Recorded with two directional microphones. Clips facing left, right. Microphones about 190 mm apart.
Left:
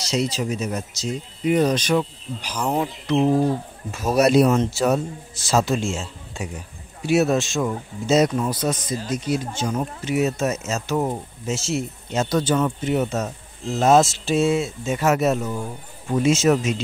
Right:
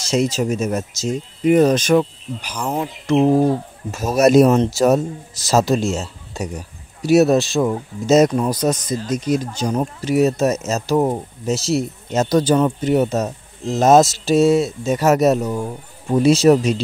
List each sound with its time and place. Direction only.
0.0 s speech: 50° right (ahead or behind)
2.5 s speech: centre (ahead or behind)
4.2 s speech: 45° right (ahead or behind)